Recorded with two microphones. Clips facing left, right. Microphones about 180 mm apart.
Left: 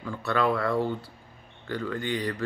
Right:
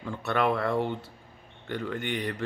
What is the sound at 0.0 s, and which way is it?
Speech, 20° right (ahead or behind).